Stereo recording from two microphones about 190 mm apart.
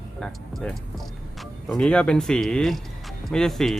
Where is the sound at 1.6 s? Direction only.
5° left (ahead or behind).